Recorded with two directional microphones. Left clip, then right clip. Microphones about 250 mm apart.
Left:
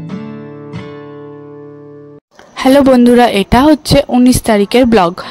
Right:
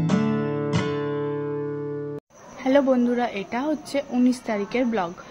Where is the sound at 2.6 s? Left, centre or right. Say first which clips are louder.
Left 12 dB; left.